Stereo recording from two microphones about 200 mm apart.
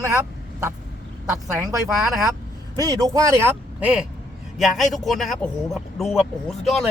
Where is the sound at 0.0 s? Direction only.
15° right (ahead or behind).